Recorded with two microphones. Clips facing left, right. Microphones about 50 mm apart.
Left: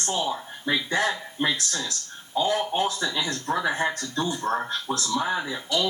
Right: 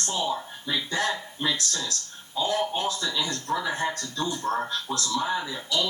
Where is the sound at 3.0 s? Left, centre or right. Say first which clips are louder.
Left 2 dB; centre.